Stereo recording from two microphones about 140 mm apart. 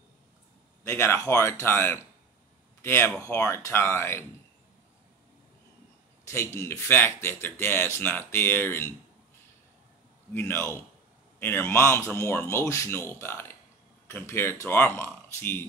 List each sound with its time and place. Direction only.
0.8 s speech: 15° left (ahead or behind)
6.2 s speech: 20° left (ahead or behind)
10.3 s speech: 15° left (ahead or behind)